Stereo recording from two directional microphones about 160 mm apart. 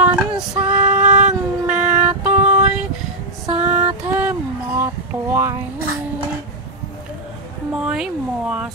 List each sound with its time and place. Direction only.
0.0 s female singing: 10° right (ahead or behind)
3.5 s female singing: 45° right (ahead or behind)
4.1 s child singing: 10° right (ahead or behind)
7.7 s a sound: 5° right (ahead or behind)